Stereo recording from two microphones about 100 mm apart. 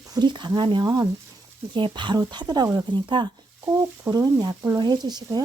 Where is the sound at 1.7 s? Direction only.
50° right (ahead or behind).